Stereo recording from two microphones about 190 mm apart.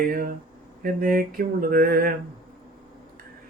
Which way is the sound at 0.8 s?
50° right (ahead or behind).